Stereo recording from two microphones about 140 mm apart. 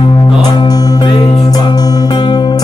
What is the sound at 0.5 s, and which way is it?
Music, 30° left (ahead or behind).